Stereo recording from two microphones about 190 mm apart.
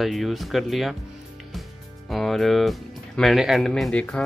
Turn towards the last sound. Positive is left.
turn(degrees=5)  # may be behind; listen again after turning